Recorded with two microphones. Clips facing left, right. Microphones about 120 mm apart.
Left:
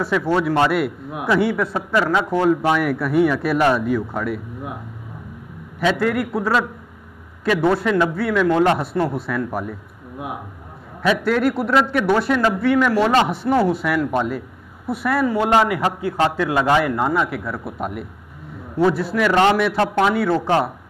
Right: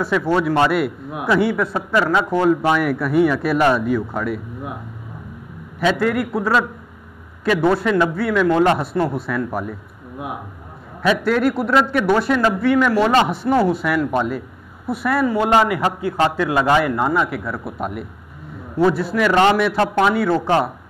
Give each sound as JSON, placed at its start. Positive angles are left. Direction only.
{"t": 0.0, "sound": "a man's voice", "side_deg": -20}
{"t": 5.8, "sound": "a man's voice", "side_deg": -20}
{"t": 8.2, "sound": "a man's voice", "side_deg": -20}
{"t": 13.5, "sound": "a man's voice", "side_deg": -30}
{"t": 15.0, "sound": "a man's voice", "side_deg": -20}
{"t": 19.1, "sound": "a man's voice", "side_deg": -15}